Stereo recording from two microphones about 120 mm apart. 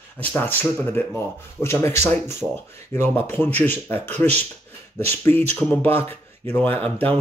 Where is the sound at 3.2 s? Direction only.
15° left (ahead or behind).